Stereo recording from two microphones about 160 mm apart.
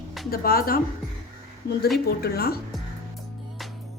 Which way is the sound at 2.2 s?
75° left (ahead or behind).